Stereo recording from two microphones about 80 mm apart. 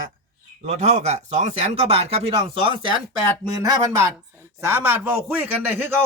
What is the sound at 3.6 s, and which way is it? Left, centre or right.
A man's voice, right.